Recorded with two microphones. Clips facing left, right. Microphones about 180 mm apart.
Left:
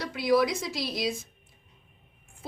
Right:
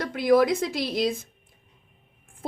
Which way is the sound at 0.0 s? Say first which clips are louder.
Right 4 dB; 55° right (ahead or behind).